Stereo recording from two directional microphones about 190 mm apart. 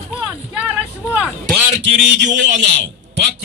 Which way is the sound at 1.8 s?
70° right (ahead or behind).